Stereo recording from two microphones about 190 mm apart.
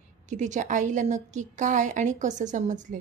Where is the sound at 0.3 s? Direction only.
40° right (ahead or behind).